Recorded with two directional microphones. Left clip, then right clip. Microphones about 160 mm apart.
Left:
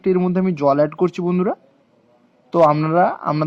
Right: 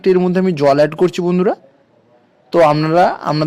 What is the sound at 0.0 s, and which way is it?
A man's voice, 25° right (ahead or behind).